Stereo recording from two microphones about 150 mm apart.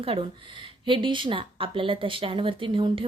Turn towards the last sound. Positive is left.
turn(degrees=-35)  # may be behind; listen again after turning